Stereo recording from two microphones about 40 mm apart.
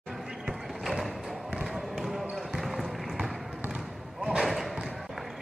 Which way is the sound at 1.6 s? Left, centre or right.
Centre.